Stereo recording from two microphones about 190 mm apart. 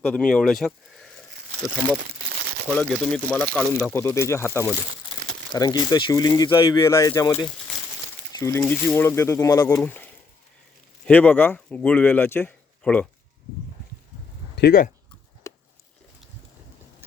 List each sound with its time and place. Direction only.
0.1 s speech: 5° left (ahead or behind)
2.7 s speech: 10° left (ahead or behind)
3.9 s speech: 15° left (ahead or behind)
14.5 s speech: 55° left (ahead or behind)
15.4 s a sound: 15° left (ahead or behind)